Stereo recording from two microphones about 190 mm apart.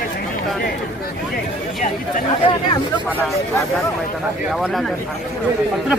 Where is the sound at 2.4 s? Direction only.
25° left (ahead or behind).